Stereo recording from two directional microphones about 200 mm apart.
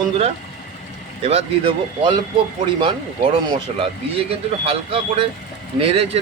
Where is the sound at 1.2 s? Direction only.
30° right (ahead or behind).